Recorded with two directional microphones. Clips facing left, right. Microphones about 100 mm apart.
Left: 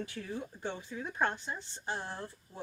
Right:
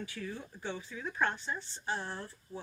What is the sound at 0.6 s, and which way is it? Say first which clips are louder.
Speech: left 1 dB; 50° left (ahead or behind).